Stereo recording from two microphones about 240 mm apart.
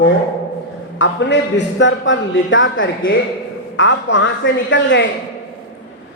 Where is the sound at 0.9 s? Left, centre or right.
Left.